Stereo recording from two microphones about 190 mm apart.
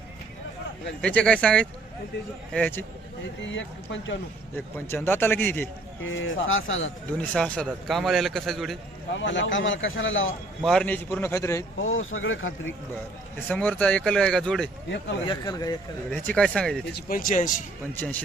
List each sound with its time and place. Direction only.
1.0 s a man's voice: 5° left (ahead or behind)
3.4 s speech: 75° left (ahead or behind)
4.5 s a man's voice: 10° left (ahead or behind)
6.0 s speech: 90° left
7.2 s a man's voice: 5° left (ahead or behind)
9.1 s a man's voice: 75° left (ahead or behind)
10.6 s a man's voice: 5° left (ahead or behind)
11.8 s speech: 90° left
13.5 s a man's voice: 5° left (ahead or behind)
15.3 s speech: 20° left (ahead or behind)
16.1 s a man's voice: 5° left (ahead or behind)
16.9 s speech: 50° left (ahead or behind)